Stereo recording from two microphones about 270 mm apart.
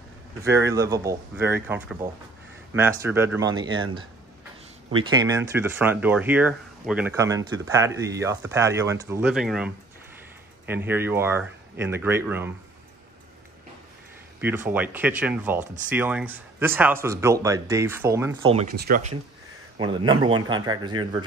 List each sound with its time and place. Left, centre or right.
0.4 s speech: centre
10.7 s speech: centre
14.4 s speech: centre
18.8 s speech: right
19.8 s speech: centre